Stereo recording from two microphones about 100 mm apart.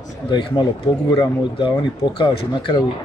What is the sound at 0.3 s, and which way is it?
A man's voice, 50° left (ahead or behind).